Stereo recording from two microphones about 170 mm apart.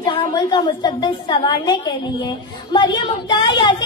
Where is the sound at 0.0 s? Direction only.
30° left (ahead or behind).